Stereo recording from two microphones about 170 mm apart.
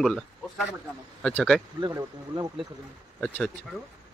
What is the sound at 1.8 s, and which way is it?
Speech, 20° right (ahead or behind).